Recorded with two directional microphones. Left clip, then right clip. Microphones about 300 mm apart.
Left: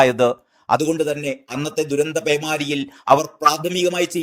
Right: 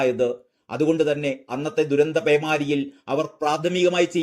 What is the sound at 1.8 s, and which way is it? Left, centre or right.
Speech, centre.